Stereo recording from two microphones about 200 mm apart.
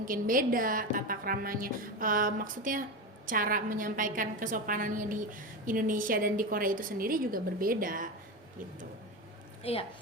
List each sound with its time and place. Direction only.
0.0 s a woman's voice: 45° right (ahead or behind)
9.7 s speech: 30° left (ahead or behind)